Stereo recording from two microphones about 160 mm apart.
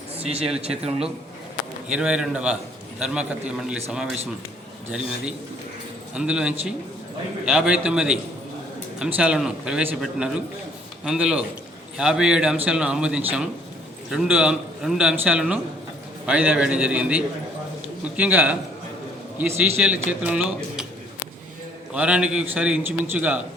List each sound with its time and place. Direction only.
0.2 s a man's voice: 40° right (ahead or behind)
1.9 s a man's voice: 5° right (ahead or behind)
4.9 s a man's voice: 5° right (ahead or behind)
21.9 s a man's voice: 5° right (ahead or behind)